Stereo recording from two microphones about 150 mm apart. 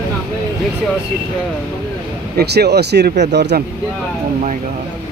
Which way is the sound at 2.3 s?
90° right.